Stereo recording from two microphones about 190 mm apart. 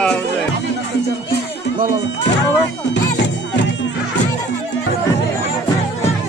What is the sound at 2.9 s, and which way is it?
Music, 65° left (ahead or behind).